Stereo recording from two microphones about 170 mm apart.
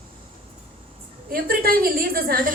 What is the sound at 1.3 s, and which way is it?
A woman's voice, 60° right (ahead or behind).